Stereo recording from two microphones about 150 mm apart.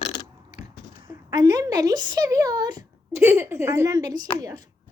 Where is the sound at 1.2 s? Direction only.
25° right (ahead or behind).